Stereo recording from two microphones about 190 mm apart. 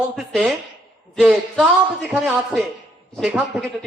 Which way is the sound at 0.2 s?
Centre (ahead or behind).